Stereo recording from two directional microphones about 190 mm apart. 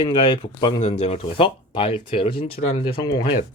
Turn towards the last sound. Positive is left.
turn(degrees=25)  # may be behind; listen again after turning